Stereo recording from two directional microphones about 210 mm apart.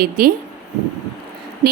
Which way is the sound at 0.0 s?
45° right (ahead or behind).